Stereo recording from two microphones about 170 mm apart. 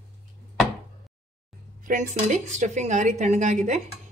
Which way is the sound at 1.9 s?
50° right (ahead or behind).